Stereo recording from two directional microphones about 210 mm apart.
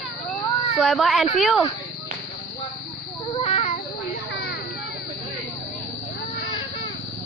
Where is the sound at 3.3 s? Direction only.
30° left (ahead or behind).